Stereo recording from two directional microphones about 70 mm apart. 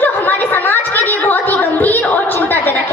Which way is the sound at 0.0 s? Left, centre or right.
Left.